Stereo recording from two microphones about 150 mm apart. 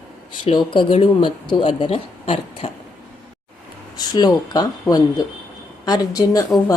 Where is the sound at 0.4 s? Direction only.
35° left (ahead or behind).